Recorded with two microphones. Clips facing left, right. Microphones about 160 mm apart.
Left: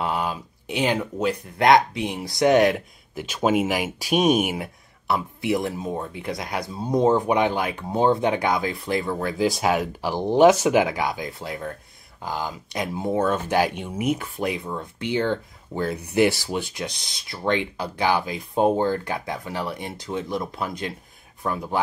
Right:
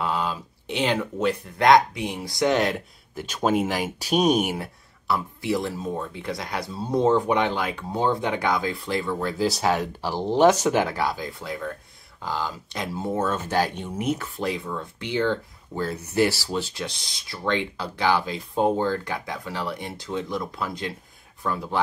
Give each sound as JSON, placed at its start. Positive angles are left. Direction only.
{"t": 0.0, "sound": "speech", "side_deg": 15}
{"t": 5.0, "sound": "speech", "side_deg": 20}